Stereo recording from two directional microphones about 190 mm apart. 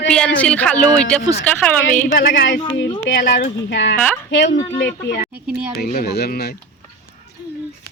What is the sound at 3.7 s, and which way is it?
Speech, 65° left (ahead or behind).